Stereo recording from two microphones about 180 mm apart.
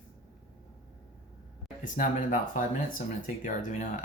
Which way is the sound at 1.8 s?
50° left (ahead or behind).